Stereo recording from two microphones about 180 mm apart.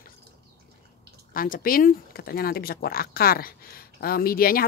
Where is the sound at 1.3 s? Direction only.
50° left (ahead or behind).